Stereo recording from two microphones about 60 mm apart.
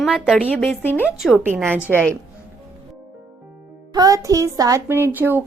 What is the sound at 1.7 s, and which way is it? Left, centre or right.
Speech, right.